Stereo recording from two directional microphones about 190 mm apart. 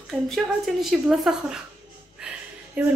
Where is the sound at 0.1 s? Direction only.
Centre (ahead or behind).